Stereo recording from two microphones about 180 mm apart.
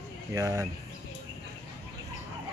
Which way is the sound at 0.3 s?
15° right (ahead or behind).